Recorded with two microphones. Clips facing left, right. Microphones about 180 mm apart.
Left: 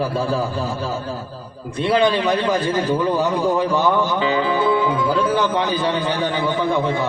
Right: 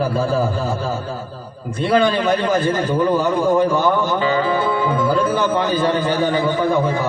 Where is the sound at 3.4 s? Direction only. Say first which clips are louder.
Right 2 dB; 45° right (ahead or behind).